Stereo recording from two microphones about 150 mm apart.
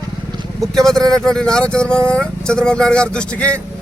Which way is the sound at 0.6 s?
5° left (ahead or behind).